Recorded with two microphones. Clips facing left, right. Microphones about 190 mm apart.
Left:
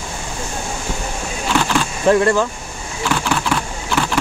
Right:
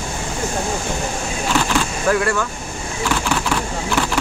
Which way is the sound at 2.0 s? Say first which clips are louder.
Left 6 dB; 25° left (ahead or behind).